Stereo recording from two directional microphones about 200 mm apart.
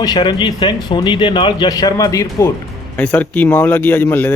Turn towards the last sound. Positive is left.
turn(degrees=10)  # may be behind; listen again after turning